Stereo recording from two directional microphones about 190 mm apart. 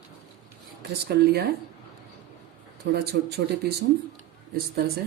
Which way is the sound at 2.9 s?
60° right (ahead or behind).